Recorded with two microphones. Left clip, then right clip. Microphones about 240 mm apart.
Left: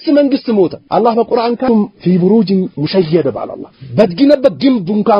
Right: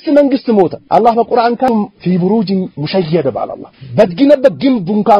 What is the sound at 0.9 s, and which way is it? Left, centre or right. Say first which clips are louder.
A man's voice: right 2 dB; right.